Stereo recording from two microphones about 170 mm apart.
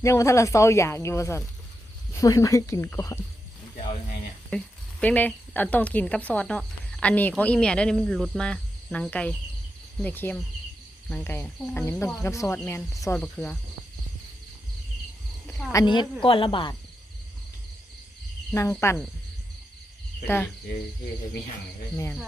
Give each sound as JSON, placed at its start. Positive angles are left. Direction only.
{"t": 0.0, "sound": "speech", "side_deg": 15}
{"t": 4.5, "sound": "speech", "side_deg": 5}
{"t": 15.7, "sound": "speech", "side_deg": 25}
{"t": 18.5, "sound": "speech", "side_deg": 15}
{"t": 20.2, "sound": "speech", "side_deg": 15}